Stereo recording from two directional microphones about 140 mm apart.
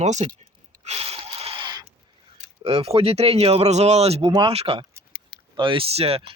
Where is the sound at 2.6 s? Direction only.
45° right (ahead or behind).